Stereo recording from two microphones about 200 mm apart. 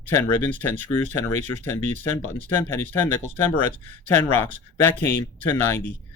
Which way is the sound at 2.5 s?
10° left (ahead or behind).